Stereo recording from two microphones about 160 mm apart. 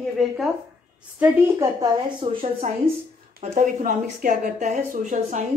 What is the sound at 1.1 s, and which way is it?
Speech, 10° right (ahead or behind).